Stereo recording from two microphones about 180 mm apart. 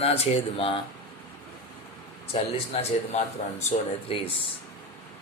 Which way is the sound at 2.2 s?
35° left (ahead or behind).